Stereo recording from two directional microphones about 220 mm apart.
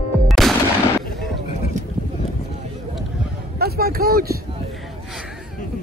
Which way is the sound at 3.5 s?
45° right (ahead or behind).